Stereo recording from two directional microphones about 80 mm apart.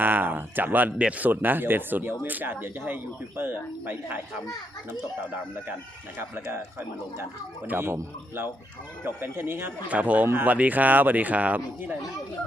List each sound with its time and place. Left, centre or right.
0.0 s speech: right
6.1 s speech: right
9.0 s speech: right